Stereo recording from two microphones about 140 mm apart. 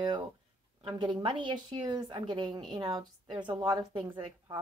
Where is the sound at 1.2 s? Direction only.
35° right (ahead or behind).